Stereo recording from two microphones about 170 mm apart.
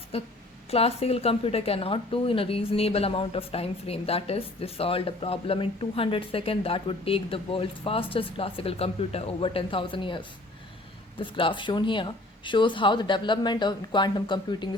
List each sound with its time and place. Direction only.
0.1 s a woman's voice: 35° left (ahead or behind)